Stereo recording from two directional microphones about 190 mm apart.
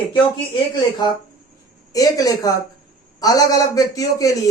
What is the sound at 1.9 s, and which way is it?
A man's voice, 20° left (ahead or behind).